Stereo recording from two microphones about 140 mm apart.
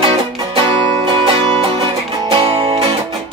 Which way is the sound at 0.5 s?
35° right (ahead or behind).